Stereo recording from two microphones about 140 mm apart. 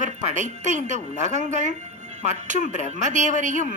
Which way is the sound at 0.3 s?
60° right (ahead or behind).